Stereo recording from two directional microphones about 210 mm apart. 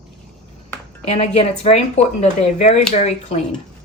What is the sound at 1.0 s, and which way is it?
A woman's voice, 30° left (ahead or behind).